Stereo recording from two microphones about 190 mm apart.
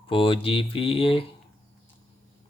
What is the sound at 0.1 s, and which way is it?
Speech, 30° left (ahead or behind).